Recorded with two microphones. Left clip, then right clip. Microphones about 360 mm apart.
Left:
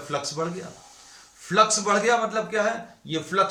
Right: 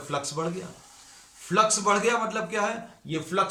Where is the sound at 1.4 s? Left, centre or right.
Centre.